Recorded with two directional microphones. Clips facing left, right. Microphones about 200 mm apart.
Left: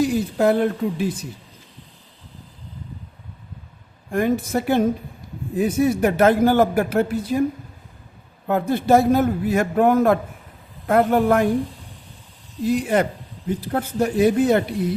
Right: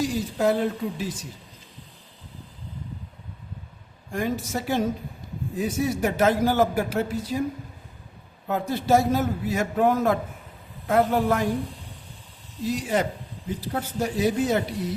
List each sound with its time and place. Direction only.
0.0 s a man's voice: 60° left (ahead or behind)
4.1 s a man's voice: 55° left (ahead or behind)
8.4 s a man's voice: 60° left (ahead or behind)
12.6 s a man's voice: 60° left (ahead or behind)